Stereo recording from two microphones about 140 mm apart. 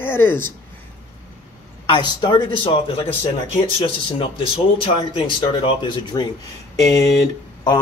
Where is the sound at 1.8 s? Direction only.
40° left (ahead or behind).